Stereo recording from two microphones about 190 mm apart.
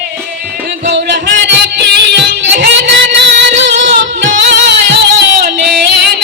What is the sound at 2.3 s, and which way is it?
Music, 65° right (ahead or behind).